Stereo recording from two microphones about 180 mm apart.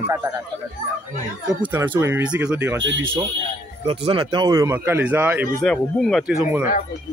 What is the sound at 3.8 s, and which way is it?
A man's voice, 30° right (ahead or behind).